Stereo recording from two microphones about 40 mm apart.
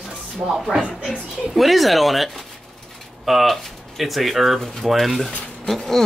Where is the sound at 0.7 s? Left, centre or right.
Right.